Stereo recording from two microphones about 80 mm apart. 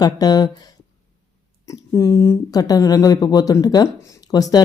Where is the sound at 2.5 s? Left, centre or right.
Left.